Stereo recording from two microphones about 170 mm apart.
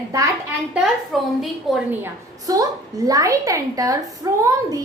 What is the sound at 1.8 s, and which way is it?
A child's voice, 15° right (ahead or behind).